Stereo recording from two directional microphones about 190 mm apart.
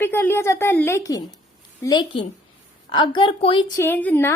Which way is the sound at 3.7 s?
10° left (ahead or behind).